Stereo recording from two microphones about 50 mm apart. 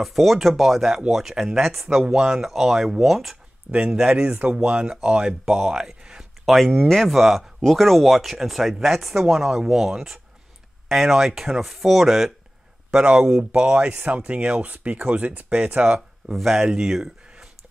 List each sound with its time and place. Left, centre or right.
0.0 s speech: centre
3.7 s speech: right
6.4 s speech: centre; by 15.4 s right
15.8 s speech: centre
16.3 s speech: centre